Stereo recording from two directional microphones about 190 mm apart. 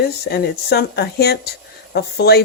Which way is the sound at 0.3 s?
55° left (ahead or behind).